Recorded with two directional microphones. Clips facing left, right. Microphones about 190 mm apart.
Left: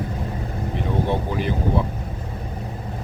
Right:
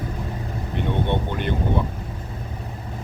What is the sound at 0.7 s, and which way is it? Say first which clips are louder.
Speech: even; centre (ahead or behind).